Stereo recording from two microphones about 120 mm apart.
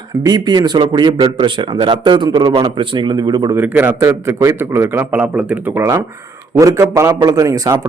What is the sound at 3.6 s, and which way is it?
A man's voice, 20° right (ahead or behind).